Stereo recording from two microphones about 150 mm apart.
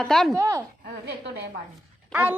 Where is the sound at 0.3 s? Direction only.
20° right (ahead or behind).